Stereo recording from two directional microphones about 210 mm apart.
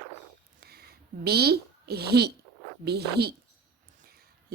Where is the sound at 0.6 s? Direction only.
50° right (ahead or behind).